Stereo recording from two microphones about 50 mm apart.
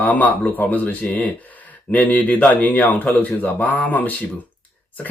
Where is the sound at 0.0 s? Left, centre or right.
Left.